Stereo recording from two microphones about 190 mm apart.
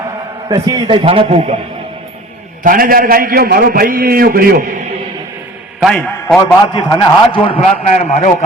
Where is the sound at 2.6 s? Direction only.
45° right (ahead or behind).